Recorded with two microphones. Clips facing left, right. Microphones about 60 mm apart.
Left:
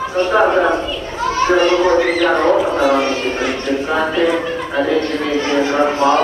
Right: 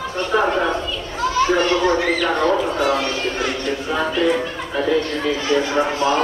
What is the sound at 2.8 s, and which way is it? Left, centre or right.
Speech, centre.